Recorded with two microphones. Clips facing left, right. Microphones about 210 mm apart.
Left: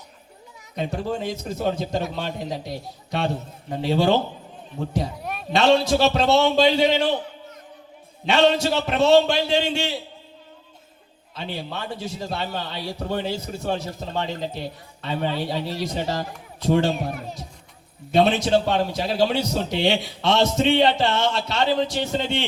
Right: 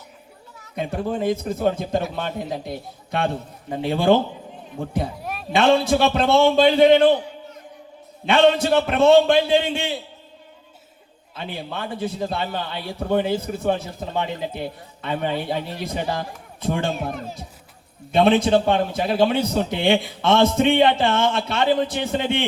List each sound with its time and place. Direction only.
0.8 s a man's voice: 55° right (ahead or behind)
5.1 s a sound: centre (ahead or behind)
5.5 s a man's voice: 55° right (ahead or behind)
8.3 s a man's voice: 55° right (ahead or behind)
11.3 s a man's voice: 55° right (ahead or behind)
18.1 s a man's voice: 55° right (ahead or behind)